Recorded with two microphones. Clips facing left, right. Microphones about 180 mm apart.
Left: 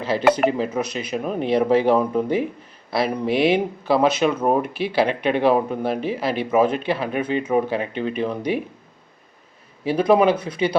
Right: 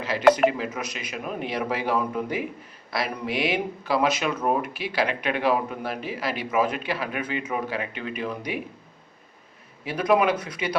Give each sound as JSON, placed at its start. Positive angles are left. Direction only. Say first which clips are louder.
{"t": 0.0, "sound": "speech", "louder": "left 1 dB", "side_deg": 30}
{"t": 9.8, "sound": "speech", "louder": "left 5 dB", "side_deg": 30}